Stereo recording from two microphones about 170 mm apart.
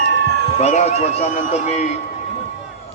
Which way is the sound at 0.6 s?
40° left (ahead or behind).